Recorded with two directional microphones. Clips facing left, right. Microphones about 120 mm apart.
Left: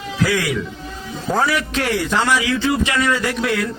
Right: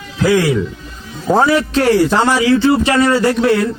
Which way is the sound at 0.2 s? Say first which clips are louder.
Right 7 dB; 30° right (ahead or behind).